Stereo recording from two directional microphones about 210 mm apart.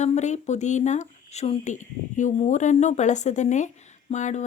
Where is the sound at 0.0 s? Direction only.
35° left (ahead or behind).